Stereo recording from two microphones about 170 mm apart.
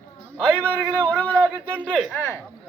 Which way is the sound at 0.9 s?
10° left (ahead or behind).